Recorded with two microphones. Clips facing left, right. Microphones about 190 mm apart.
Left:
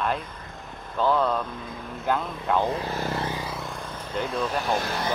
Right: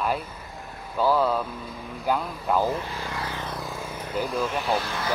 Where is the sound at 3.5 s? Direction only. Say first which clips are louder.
Right 1 dB; centre (ahead or behind).